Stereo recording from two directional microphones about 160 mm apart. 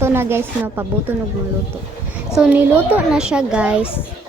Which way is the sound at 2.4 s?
10° right (ahead or behind).